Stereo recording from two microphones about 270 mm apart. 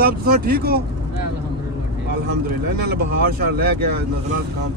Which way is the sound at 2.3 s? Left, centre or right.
Right.